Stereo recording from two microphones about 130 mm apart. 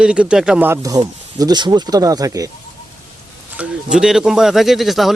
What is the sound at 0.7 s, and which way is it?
Speech, 25° right (ahead or behind).